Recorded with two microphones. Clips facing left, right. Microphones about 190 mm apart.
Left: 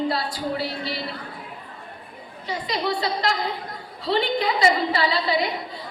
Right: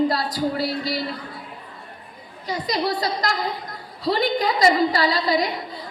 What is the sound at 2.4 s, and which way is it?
A woman's voice, 40° right (ahead or behind).